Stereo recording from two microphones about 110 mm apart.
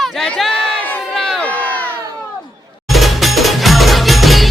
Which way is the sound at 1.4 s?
15° left (ahead or behind).